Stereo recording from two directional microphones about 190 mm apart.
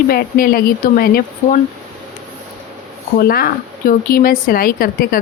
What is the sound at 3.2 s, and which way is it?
Speech, 55° left (ahead or behind).